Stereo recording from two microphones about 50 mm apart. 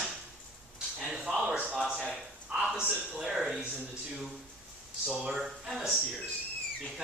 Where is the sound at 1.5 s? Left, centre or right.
Right.